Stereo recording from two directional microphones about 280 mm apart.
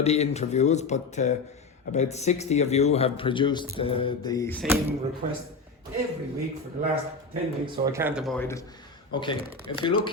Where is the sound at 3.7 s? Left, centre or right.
Centre.